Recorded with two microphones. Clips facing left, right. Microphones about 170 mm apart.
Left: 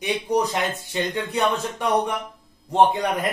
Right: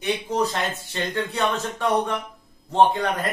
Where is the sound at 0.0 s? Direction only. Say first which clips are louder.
Left 1 dB; 15° left (ahead or behind).